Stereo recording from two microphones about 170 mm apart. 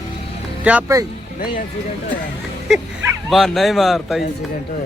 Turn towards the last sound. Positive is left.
turn(degrees=0)  # may be behind; listen again after turning